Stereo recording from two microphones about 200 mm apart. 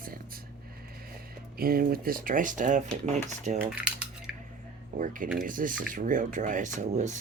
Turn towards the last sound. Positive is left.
turn(degrees=-35)  # may be behind; listen again after turning